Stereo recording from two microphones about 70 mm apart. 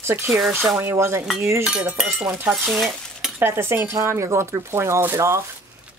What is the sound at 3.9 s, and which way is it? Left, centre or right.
Speech, right.